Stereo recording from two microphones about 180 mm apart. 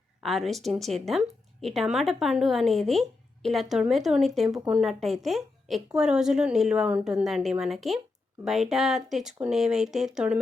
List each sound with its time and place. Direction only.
0.2 s a woman's voice: centre (ahead or behind)